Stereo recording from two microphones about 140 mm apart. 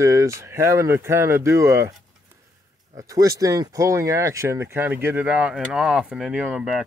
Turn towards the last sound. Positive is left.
turn(degrees=-10)  # may be behind; listen again after turning